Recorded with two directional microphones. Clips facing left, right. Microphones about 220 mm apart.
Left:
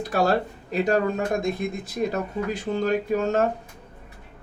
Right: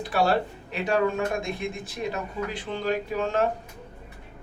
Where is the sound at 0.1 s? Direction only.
40° left (ahead or behind).